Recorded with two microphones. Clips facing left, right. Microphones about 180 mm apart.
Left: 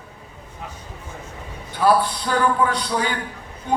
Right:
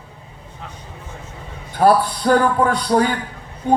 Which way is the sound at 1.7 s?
45° right (ahead or behind).